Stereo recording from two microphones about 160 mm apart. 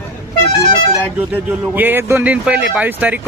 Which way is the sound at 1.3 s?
10° right (ahead or behind).